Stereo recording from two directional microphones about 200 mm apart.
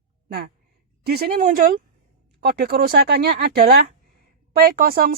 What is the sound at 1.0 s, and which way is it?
A woman's voice, 50° right (ahead or behind).